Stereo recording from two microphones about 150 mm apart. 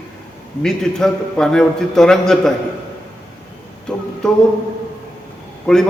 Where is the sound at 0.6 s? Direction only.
5° left (ahead or behind).